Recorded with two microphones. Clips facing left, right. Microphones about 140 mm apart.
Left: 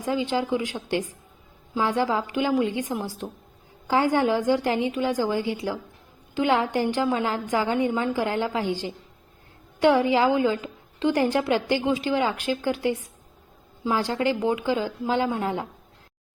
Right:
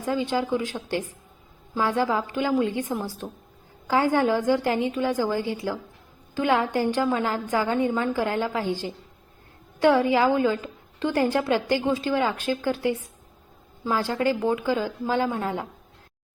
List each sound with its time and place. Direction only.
0.0 s a woman's voice: 20° left (ahead or behind)